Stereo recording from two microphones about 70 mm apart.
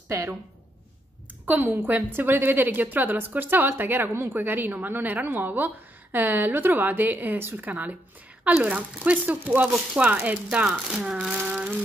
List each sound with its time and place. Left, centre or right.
0.1 s a woman's voice: right
1.4 s a woman's voice: right
11.1 s a sound: centre